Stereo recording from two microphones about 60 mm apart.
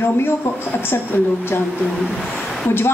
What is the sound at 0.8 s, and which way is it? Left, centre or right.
Speech, left.